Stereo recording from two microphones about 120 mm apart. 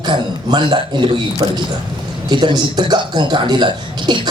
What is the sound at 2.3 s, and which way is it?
Speech, 40° right (ahead or behind).